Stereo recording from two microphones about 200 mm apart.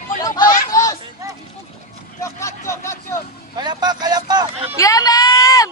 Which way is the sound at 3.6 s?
20° right (ahead or behind).